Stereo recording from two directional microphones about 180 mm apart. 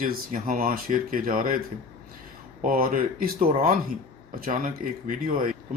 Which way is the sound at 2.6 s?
55° right (ahead or behind).